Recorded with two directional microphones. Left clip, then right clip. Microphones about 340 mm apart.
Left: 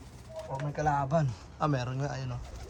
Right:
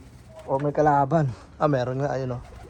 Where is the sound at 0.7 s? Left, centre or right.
Centre.